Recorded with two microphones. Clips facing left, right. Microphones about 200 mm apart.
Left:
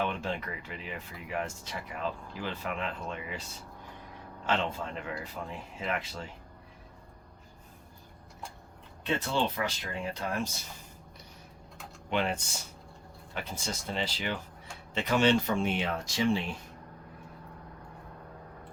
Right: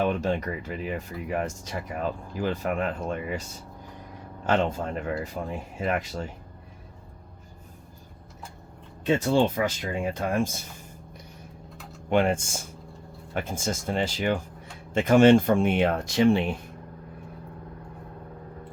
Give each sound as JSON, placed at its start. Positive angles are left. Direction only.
{"t": 0.0, "sound": "speech", "side_deg": -40}
{"t": 4.4, "sound": "speech", "side_deg": -45}
{"t": 9.0, "sound": "speech", "side_deg": -45}
{"t": 12.1, "sound": "speech", "side_deg": -50}